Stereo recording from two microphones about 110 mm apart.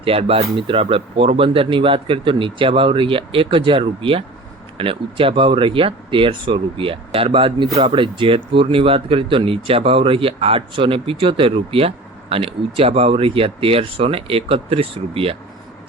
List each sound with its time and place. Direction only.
0.0 s speech: 60° right (ahead or behind)